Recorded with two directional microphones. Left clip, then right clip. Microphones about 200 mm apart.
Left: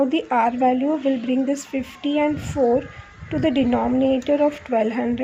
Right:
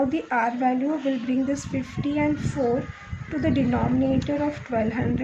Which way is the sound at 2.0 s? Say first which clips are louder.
Left 4 dB; 30° left (ahead or behind).